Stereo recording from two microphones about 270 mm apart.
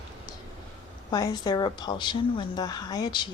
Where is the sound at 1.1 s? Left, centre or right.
Centre.